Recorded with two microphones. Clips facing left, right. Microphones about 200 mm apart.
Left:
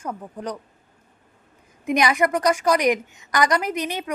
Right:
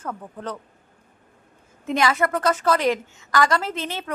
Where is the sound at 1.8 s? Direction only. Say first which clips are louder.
Left 2 dB; 15° left (ahead or behind).